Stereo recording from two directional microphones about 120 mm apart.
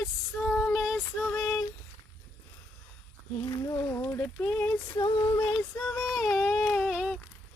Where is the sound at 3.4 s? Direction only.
30° left (ahead or behind).